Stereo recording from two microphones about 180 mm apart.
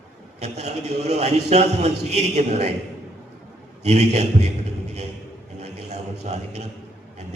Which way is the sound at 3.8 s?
35° right (ahead or behind).